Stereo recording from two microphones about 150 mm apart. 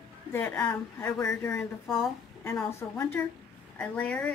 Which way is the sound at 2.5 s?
10° left (ahead or behind).